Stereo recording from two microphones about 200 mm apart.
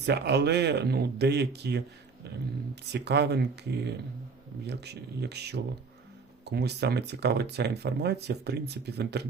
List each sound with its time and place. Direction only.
0.0 s speech: 55° right (ahead or behind)
2.9 s speech: 55° right (ahead or behind)